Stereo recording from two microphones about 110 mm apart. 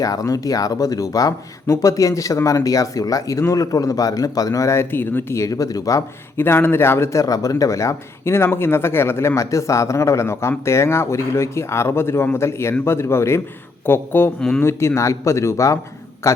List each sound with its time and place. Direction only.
0.0 s speech: 30° left (ahead or behind)
6.4 s speech: 20° left (ahead or behind)